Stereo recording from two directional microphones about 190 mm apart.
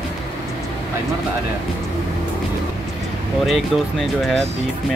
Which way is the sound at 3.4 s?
Centre (ahead or behind).